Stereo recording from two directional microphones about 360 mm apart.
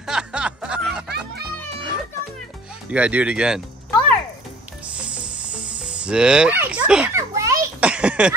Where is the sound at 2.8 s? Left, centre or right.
Centre.